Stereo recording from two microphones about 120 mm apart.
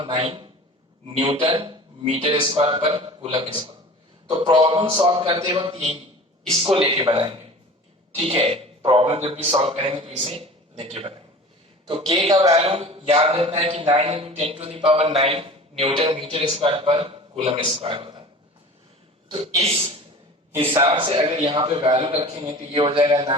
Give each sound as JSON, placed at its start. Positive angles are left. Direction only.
{"t": 0.0, "sound": "a man's voice", "side_deg": -50}
{"t": 6.8, "sound": "speech", "side_deg": -30}
{"t": 7.1, "sound": "a man's voice", "side_deg": -45}
{"t": 19.3, "sound": "a man's voice", "side_deg": -55}